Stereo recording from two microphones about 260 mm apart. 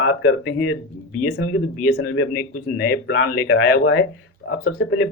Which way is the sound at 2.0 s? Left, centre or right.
Left.